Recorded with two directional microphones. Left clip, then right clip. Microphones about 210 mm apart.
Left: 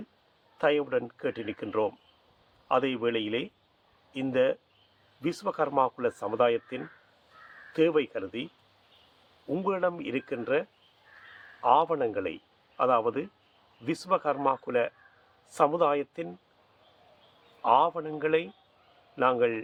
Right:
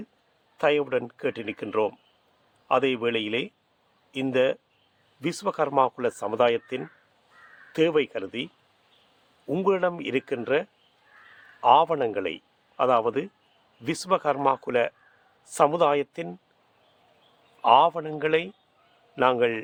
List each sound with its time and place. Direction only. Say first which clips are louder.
0.6 s speech: right 3 dB; 40° right (ahead or behind)
9.5 s a man's voice: right 5 dB; 40° right (ahead or behind)
17.6 s speech: right 5 dB; 40° right (ahead or behind)